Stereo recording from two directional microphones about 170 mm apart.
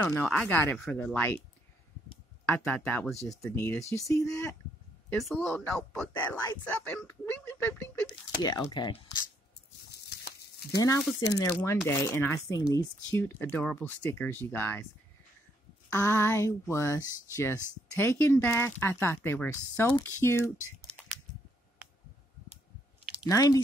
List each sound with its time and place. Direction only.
0.0 s speech: 10° left (ahead or behind)
2.4 s speech: 10° left (ahead or behind)
5.1 s speech: centre (ahead or behind); by 9.0 s 25° left (ahead or behind)
9.8 s a sound: 70° left (ahead or behind)
11.3 s speech: 15° left (ahead or behind)
15.9 s speech: 15° left (ahead or behind)
20.8 s a sound: 5° left (ahead or behind)
23.2 s speech: 20° left (ahead or behind)